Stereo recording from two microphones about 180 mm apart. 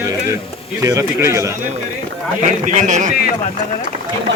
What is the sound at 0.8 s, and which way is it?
Speech, 15° right (ahead or behind).